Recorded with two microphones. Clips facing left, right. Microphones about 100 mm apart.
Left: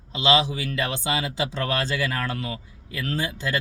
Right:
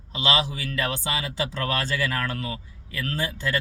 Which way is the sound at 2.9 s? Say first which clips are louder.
Left 1 dB; 20° left (ahead or behind).